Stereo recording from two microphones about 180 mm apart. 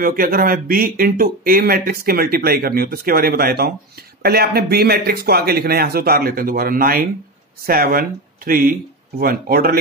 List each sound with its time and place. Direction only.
0.0 s speech: 55° right (ahead or behind)